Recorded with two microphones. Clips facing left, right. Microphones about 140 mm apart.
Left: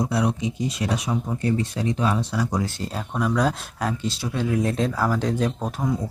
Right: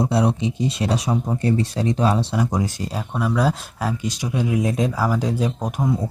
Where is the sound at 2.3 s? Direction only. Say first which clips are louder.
Right 3 dB; 20° right (ahead or behind).